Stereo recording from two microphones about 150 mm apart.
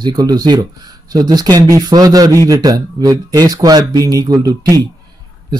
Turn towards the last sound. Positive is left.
turn(degrees=-25)  # may be behind; listen again after turning